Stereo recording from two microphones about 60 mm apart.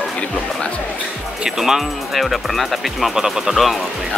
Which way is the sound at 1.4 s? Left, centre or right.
Centre.